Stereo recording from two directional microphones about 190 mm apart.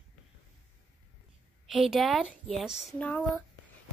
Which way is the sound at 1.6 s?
Centre (ahead or behind).